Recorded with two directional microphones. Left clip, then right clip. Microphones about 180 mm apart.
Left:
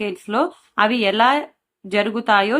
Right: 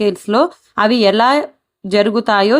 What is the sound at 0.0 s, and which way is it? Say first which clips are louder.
Speech: right 7 dB; 45° right (ahead or behind).